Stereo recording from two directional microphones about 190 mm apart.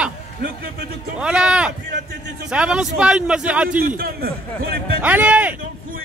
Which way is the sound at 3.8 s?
50° right (ahead or behind).